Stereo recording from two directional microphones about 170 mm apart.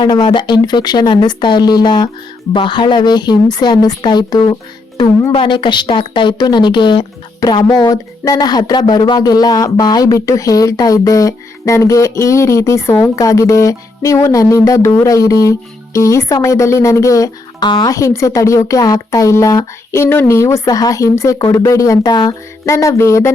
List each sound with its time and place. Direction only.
0.0 s speech: 25° left (ahead or behind)